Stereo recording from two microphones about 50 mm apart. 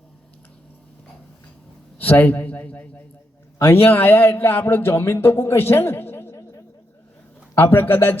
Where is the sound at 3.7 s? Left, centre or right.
Left.